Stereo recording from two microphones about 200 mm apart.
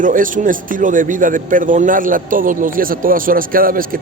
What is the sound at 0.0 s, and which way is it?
A man's voice, 40° right (ahead or behind).